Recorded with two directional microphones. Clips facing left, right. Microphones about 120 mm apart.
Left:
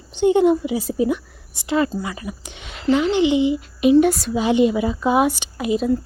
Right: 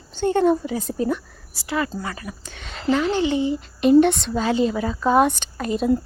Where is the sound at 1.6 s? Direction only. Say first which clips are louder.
Left 5 dB; 25° left (ahead or behind).